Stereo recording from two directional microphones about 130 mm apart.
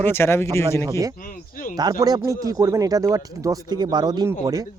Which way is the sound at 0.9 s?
25° right (ahead or behind).